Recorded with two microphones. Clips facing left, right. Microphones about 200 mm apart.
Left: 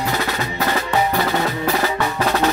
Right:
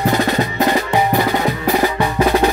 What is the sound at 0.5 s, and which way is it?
Music, 15° right (ahead or behind).